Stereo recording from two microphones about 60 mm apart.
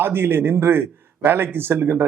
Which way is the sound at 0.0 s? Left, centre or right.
Right.